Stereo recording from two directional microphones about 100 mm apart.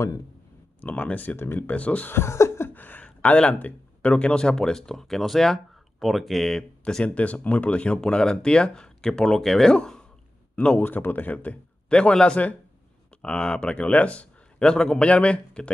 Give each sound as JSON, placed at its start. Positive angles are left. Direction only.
{"t": 0.7, "sound": "speech", "side_deg": 15}
{"t": 2.1, "sound": "speech", "side_deg": 30}